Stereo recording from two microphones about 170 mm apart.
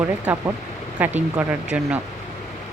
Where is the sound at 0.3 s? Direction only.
5° right (ahead or behind).